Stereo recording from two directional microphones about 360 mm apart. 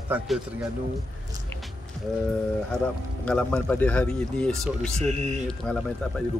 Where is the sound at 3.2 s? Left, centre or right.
Centre.